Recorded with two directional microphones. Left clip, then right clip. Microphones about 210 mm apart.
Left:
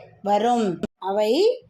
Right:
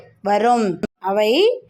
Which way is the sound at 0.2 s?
25° right (ahead or behind).